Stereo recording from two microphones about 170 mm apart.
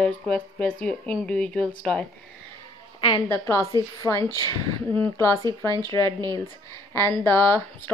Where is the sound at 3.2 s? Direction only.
15° left (ahead or behind).